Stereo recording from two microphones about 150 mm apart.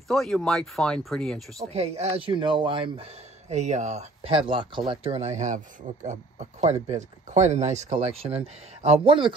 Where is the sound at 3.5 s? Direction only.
50° right (ahead or behind).